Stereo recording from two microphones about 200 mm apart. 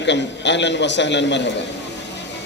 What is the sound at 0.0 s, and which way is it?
A man's voice, 60° left (ahead or behind).